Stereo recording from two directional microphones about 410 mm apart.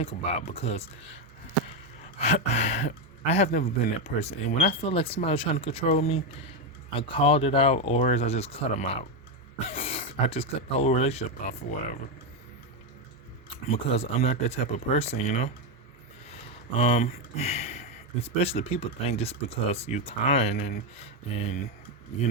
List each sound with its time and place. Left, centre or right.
0.0 s speech: centre
2.1 s speech: centre
13.7 s speech: centre